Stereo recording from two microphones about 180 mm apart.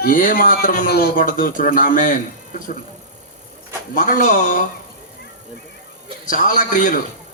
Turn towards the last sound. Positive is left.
turn(degrees=45)  # may be behind; listen again after turning